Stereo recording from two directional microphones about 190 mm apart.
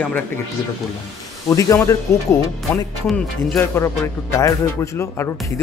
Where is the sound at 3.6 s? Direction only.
15° left (ahead or behind).